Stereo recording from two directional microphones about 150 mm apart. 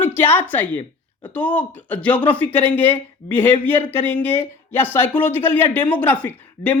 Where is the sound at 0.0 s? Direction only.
15° left (ahead or behind).